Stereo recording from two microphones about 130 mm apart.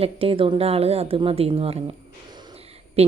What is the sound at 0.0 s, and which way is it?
A woman's voice, 45° right (ahead or behind).